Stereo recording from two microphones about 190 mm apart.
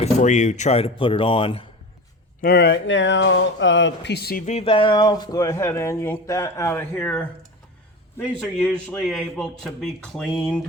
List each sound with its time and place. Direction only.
0.0 s speech: 40° left (ahead or behind)
2.4 s speech: 60° left (ahead or behind)
4.4 s a man's voice: 30° left (ahead or behind); by 10.6 s 5° left (ahead or behind)